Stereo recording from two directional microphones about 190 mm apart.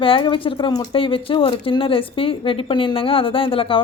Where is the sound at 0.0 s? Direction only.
25° left (ahead or behind).